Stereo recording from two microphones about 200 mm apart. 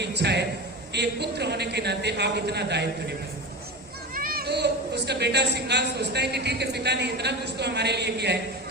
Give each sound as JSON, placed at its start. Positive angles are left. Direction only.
{"t": 0.0, "sound": "a sound", "side_deg": -55}
{"t": 0.9, "sound": "a woman's voice", "side_deg": -55}
{"t": 4.1, "sound": "a woman's voice", "side_deg": -45}